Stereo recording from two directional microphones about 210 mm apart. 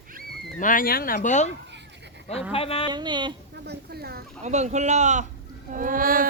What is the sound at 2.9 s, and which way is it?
Speech, 20° right (ahead or behind).